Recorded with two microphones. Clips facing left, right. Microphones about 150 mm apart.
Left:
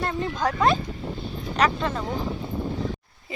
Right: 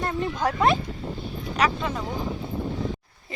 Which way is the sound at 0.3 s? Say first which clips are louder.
Even; 20° right (ahead or behind).